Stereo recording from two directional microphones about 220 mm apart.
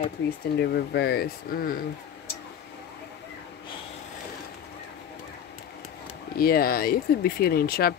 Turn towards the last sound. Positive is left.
turn(degrees=45)  # may be behind; listen again after turning